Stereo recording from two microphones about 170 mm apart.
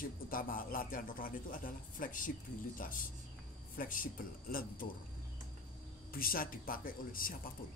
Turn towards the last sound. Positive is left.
turn(degrees=55)  # may be behind; listen again after turning